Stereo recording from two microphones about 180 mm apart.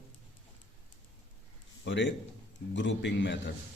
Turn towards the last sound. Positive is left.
turn(degrees=80)